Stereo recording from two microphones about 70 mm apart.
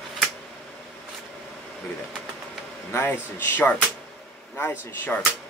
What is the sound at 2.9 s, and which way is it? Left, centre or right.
Speech, left.